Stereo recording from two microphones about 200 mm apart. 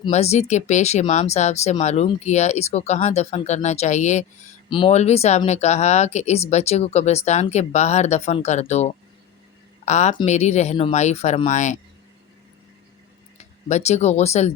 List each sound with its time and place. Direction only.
0.1 s speech: 35° left (ahead or behind)
13.4 s speech: 35° left (ahead or behind)